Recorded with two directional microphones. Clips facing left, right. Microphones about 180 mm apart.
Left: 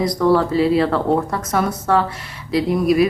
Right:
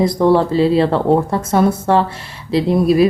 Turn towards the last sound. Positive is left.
turn(degrees=-30)  # may be behind; listen again after turning